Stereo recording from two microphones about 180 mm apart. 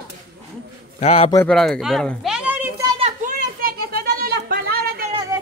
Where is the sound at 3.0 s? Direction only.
40° right (ahead or behind); by 5.0 s 55° right (ahead or behind).